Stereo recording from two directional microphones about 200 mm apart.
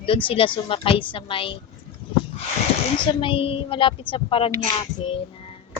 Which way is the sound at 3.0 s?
25° left (ahead or behind).